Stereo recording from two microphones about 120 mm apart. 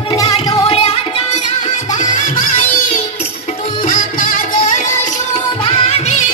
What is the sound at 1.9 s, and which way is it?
Music, 90° left.